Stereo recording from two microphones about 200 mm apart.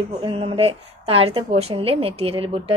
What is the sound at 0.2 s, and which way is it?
A woman's voice, 30° right (ahead or behind).